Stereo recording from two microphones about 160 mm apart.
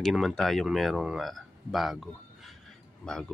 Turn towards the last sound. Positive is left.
turn(degrees=5)  # may be behind; listen again after turning